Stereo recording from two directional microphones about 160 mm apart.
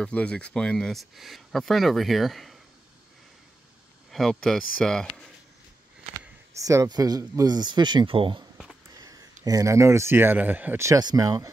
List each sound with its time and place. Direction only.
0.0 s speech: 5° left (ahead or behind)
4.1 s speech: 5° left (ahead or behind)
6.5 s speech: 20° right (ahead or behind)